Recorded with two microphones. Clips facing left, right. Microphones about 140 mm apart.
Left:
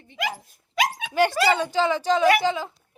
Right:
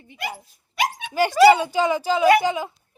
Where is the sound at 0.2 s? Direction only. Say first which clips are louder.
Left 2 dB; 90° left.